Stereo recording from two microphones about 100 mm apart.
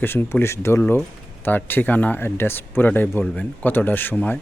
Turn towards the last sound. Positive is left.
turn(degrees=20)  # may be behind; listen again after turning